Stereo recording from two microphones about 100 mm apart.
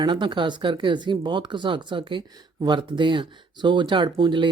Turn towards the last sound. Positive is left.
turn(degrees=-50)  # may be behind; listen again after turning